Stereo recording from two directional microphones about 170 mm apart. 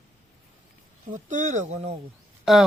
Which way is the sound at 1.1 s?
45° right (ahead or behind).